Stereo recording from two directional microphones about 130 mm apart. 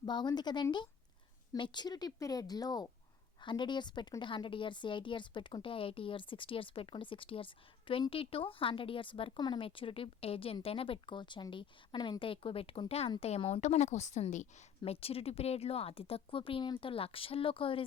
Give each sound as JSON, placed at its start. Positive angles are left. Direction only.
{"t": 0.0, "sound": "a woman's voice", "side_deg": 35}
{"t": 14.8, "sound": "speech", "side_deg": 50}